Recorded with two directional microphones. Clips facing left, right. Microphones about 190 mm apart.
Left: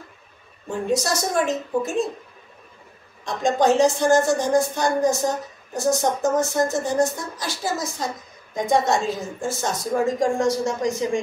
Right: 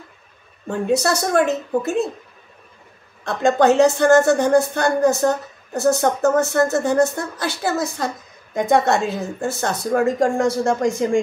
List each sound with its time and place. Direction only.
0.7 s a woman's voice: 65° right (ahead or behind)
3.3 s a woman's voice: 60° right (ahead or behind)